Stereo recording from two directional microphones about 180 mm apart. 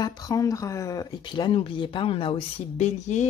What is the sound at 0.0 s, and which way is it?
Speech, 20° left (ahead or behind).